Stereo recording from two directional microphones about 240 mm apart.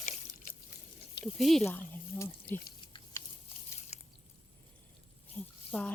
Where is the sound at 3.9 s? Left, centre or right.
Left.